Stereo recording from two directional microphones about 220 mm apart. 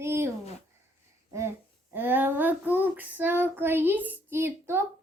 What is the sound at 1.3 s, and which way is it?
Speech, 10° right (ahead or behind).